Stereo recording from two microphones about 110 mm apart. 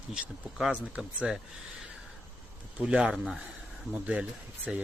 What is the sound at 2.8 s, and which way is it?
Speech, 10° right (ahead or behind).